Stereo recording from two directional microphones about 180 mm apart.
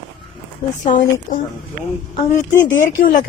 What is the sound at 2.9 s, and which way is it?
Speech, 45° left (ahead or behind).